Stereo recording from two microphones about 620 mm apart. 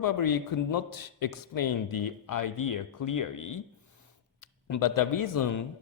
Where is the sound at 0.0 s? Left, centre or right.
Left.